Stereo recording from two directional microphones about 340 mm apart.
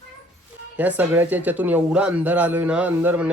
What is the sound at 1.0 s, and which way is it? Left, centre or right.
Speech, centre.